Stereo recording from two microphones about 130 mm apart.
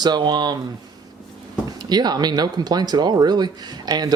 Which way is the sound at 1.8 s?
30° right (ahead or behind).